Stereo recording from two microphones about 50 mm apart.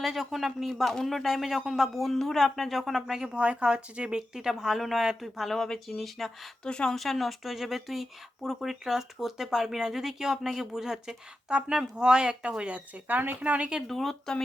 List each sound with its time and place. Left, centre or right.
0.0 s speech: centre
2.0 s speech: centre
3.3 s speech: right
4.4 s speech: centre
5.5 s speech: centre
6.9 s speech: centre; by 13.7 s right
13.8 s speech: centre